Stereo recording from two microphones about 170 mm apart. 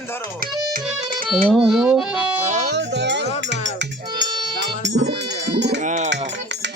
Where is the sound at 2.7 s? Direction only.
90° right.